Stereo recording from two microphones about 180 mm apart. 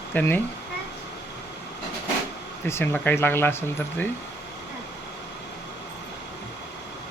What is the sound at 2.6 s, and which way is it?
Speech, 10° left (ahead or behind).